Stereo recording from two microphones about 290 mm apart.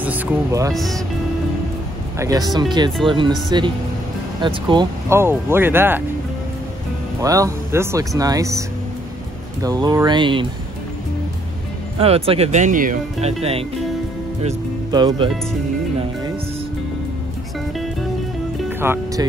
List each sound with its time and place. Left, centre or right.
0.0 s speech: centre
0.7 s speech: centre
2.1 s speech: centre
4.4 s speech: centre
7.2 s speech: centre
12.0 s speech: centre
18.8 s music: centre